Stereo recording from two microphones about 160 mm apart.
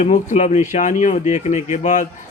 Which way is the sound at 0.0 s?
50° left (ahead or behind).